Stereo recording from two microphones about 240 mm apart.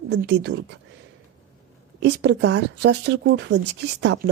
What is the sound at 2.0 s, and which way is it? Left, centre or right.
Speech, right.